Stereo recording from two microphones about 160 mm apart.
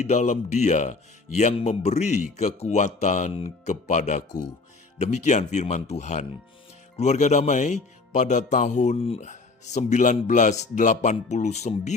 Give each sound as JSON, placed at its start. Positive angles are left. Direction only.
{"t": 0.0, "sound": "speech", "side_deg": 45}
{"t": 4.3, "sound": "speech", "side_deg": 25}
{"t": 4.9, "sound": "speech", "side_deg": 50}